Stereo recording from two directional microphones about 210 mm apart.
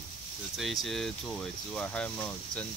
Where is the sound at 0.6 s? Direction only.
Centre (ahead or behind).